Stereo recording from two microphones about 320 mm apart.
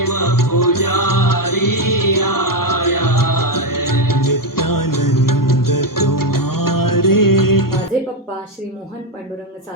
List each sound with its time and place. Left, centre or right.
0.0 s music: left